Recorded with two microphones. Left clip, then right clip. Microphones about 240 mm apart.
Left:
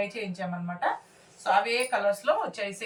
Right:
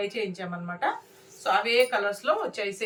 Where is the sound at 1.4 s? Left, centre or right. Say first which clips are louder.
Right 2 dB; centre.